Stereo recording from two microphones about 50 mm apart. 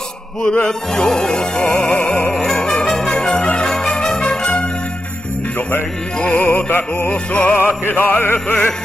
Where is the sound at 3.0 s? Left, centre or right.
Centre.